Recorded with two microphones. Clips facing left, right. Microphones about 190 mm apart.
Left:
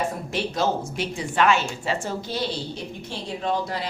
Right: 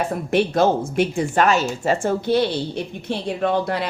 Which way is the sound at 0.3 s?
55° right (ahead or behind).